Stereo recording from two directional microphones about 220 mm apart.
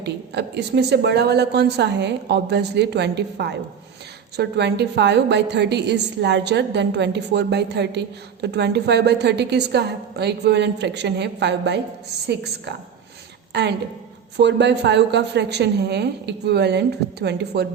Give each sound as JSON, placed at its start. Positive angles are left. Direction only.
{"t": 0.0, "sound": "a woman's voice", "side_deg": -50}